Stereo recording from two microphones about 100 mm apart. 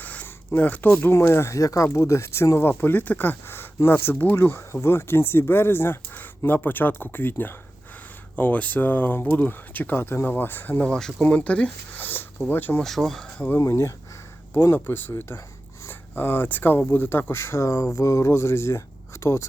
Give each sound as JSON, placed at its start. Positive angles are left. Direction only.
{"t": 0.0, "sound": "a sound", "side_deg": 15}
{"t": 1.1, "sound": "speech", "side_deg": 25}
{"t": 12.8, "sound": "speech", "side_deg": 5}
{"t": 13.6, "sound": "speech", "side_deg": 30}